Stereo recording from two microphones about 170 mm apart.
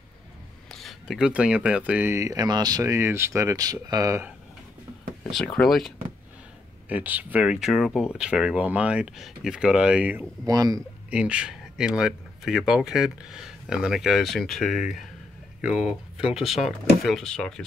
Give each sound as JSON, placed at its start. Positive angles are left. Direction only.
{"t": 0.7, "sound": "speech", "side_deg": 0}
{"t": 5.6, "sound": "speech", "side_deg": 0}
{"t": 6.9, "sound": "speech", "side_deg": -10}
{"t": 10.4, "sound": "speech", "side_deg": -25}
{"t": 11.1, "sound": "speech", "side_deg": -5}